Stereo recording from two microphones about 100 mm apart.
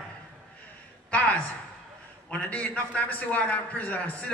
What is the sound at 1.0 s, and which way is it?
A woman's voice, 10° left (ahead or behind).